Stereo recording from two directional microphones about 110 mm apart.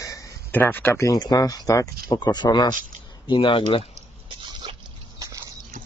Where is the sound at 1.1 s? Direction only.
35° left (ahead or behind).